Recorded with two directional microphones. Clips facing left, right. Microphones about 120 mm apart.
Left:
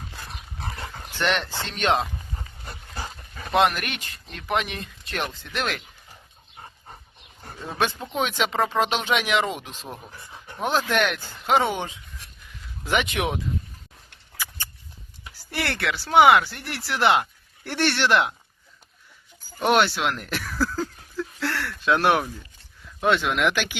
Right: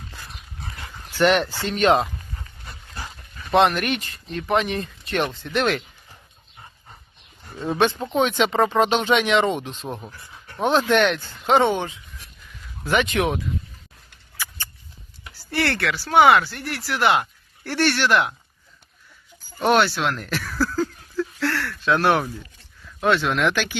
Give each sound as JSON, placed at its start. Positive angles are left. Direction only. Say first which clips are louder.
{"t": 1.2, "sound": "speech", "louder": "right 7 dB", "side_deg": -5}
{"t": 3.5, "sound": "speech", "louder": "right 3 dB", "side_deg": 0}
{"t": 7.7, "sound": "speech", "louder": "right 6 dB", "side_deg": 0}
{"t": 12.8, "sound": "speech", "louder": "right 4 dB", "side_deg": 15}
{"t": 15.2, "sound": "speech", "louder": "right 5 dB", "side_deg": 15}
{"t": 19.6, "sound": "speech", "louder": "right 2 dB", "side_deg": 15}
{"t": 20.7, "sound": "a sound", "louder": "right 5 dB", "side_deg": 10}
{"t": 21.8, "sound": "speech", "louder": "right 1 dB", "side_deg": 15}